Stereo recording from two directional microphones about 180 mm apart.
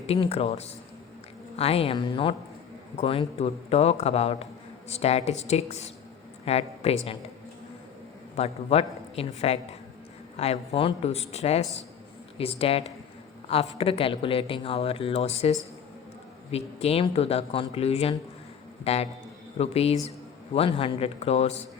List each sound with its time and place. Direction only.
0.1 s speech: 35° left (ahead or behind)
8.4 s speech: 35° left (ahead or behind)